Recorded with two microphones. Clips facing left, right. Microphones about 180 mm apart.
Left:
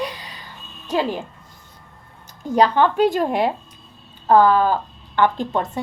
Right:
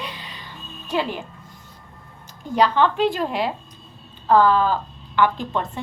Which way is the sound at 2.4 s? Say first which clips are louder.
Left 2 dB; 45° left (ahead or behind).